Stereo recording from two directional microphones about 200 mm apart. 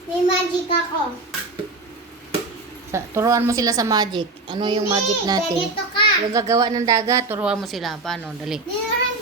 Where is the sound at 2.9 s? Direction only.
15° right (ahead or behind).